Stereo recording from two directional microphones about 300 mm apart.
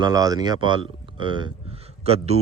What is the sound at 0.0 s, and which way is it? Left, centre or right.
Speech, centre.